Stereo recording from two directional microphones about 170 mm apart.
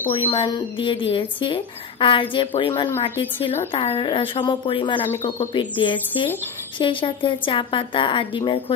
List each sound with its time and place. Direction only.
0.1 s a woman's voice: 30° left (ahead or behind)